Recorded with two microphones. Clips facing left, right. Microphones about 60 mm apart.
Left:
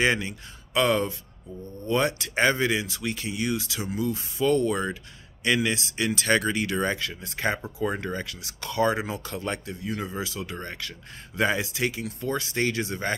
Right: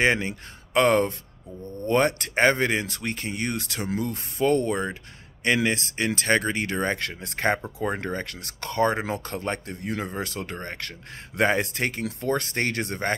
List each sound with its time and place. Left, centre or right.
0.0 s speech: right
7.0 s speech: right